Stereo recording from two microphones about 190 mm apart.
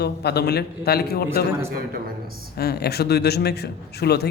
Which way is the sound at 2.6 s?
55° left (ahead or behind).